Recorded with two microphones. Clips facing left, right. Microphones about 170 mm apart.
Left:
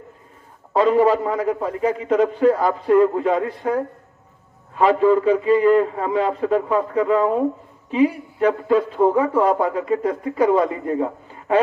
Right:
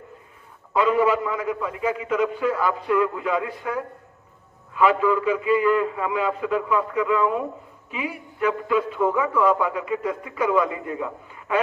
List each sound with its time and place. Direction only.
0.7 s a man's voice: 40° left (ahead or behind)